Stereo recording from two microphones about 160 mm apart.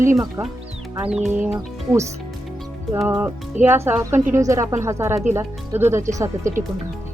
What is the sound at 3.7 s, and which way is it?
Speech, 15° right (ahead or behind).